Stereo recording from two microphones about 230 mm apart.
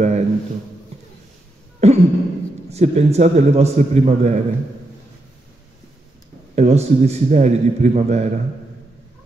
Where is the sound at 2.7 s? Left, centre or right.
Right.